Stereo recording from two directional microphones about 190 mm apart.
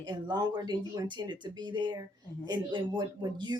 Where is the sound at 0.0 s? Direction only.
20° right (ahead or behind).